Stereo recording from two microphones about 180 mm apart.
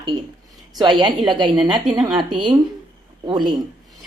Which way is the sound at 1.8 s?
5° right (ahead or behind).